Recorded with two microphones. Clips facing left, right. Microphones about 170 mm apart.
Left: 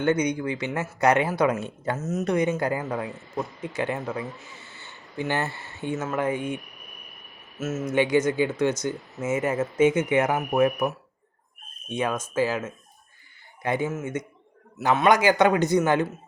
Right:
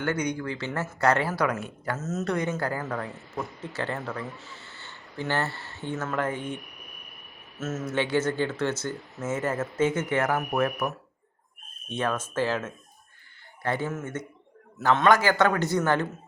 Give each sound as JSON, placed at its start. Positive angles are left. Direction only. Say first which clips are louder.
{"t": 0.0, "sound": "speech", "louder": "left 5 dB", "side_deg": 20}
{"t": 7.6, "sound": "speech", "louder": "left 4 dB", "side_deg": 10}